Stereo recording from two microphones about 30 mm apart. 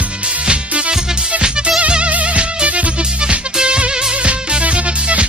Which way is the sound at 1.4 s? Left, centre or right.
Right.